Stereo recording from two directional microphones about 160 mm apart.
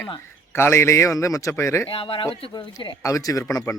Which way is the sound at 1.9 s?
35° left (ahead or behind).